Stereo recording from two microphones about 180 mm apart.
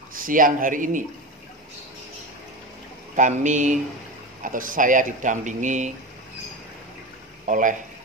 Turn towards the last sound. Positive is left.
turn(degrees=-45)  # may be behind; listen again after turning